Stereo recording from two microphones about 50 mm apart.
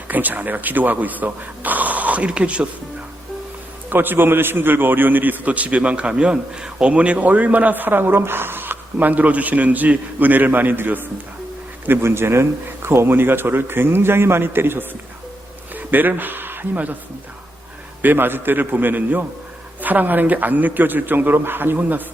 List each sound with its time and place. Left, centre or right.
0.1 s a man's voice: right
3.8 s a man's voice: right
11.9 s speech: right
15.7 s a sound: right
18.0 s a man's voice: right